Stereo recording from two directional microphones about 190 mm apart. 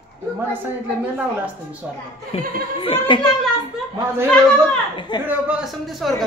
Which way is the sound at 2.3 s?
30° left (ahead or behind).